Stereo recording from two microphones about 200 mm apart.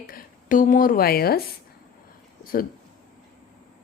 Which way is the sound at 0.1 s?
45° left (ahead or behind).